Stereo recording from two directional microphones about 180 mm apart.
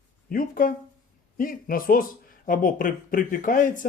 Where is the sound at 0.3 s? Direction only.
50° left (ahead or behind).